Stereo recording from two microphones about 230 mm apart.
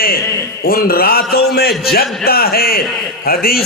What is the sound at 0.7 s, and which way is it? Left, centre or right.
A man's voice, left.